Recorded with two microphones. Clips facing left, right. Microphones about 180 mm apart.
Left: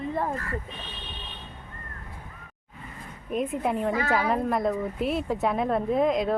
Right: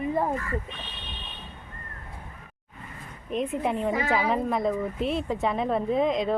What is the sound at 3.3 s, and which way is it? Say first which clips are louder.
A woman's voice: even; 5° left (ahead or behind).